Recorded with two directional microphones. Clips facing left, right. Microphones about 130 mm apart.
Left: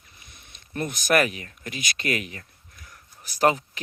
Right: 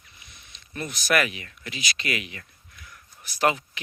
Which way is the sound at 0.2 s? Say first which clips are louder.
Left 1 dB; 50° left (ahead or behind).